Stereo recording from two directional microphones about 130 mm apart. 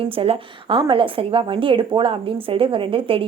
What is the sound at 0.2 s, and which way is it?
Speech, 45° right (ahead or behind).